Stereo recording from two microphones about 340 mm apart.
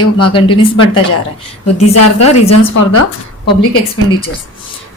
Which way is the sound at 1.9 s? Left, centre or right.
Left.